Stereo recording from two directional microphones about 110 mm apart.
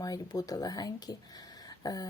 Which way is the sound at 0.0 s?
35° left (ahead or behind).